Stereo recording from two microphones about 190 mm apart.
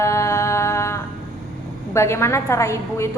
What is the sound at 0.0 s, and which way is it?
Mantra, 15° left (ahead or behind).